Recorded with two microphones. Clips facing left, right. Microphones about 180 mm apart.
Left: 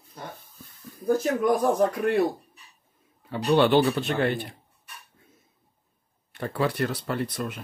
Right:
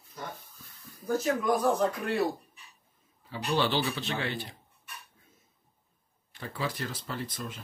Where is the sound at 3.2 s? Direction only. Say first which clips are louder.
Left 8 dB; 60° left (ahead or behind).